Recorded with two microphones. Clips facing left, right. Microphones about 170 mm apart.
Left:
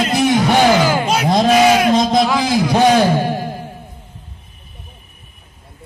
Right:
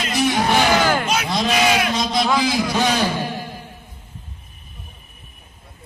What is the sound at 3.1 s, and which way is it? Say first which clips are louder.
Music: left 7 dB; 50° left (ahead or behind).